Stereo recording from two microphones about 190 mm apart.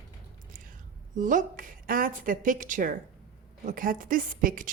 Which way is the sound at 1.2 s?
45° right (ahead or behind).